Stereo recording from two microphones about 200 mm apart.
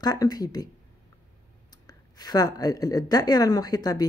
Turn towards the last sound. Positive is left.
turn(degrees=20)  # may be behind; listen again after turning